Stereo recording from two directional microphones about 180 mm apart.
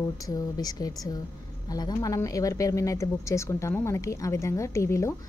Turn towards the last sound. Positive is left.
turn(degrees=15)  # may be behind; listen again after turning